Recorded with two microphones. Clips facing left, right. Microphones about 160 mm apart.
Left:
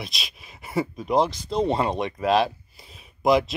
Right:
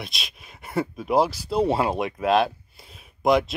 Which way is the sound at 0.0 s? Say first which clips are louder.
Even; centre (ahead or behind).